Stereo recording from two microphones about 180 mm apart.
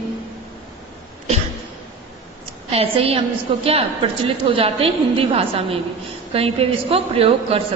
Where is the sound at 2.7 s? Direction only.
35° right (ahead or behind).